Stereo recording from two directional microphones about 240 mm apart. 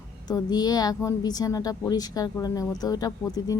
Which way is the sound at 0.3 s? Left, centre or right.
Centre.